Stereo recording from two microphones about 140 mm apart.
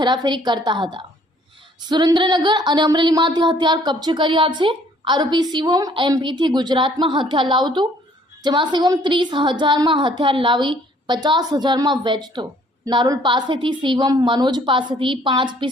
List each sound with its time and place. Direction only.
0.0 s a woman's voice: 30° right (ahead or behind)